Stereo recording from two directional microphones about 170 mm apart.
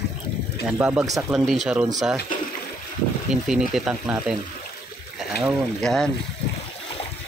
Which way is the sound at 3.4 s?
Centre (ahead or behind).